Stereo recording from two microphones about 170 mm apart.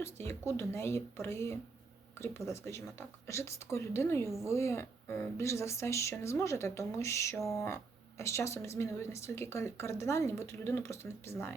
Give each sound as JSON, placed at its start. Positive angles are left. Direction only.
{"t": 0.0, "sound": "speech", "side_deg": 15}